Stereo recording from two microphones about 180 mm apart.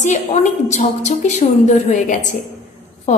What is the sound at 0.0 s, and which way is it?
A woman's voice, 40° left (ahead or behind).